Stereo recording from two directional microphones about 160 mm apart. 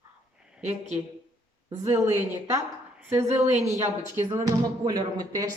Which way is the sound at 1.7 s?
20° right (ahead or behind).